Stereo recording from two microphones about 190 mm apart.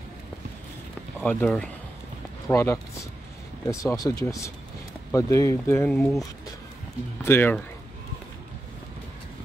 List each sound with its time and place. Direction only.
1.2 s speech: 5° left (ahead or behind)
7.2 s speech: 10° left (ahead or behind)